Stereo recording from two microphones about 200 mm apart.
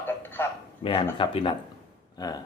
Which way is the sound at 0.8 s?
25° left (ahead or behind).